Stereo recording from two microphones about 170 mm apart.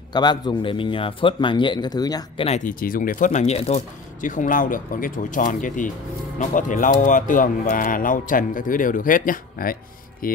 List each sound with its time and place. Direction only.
0.1 s a man's voice: 25° left (ahead or behind)
2.4 s speech: 40° left (ahead or behind)
2.7 s speech: 60° left (ahead or behind)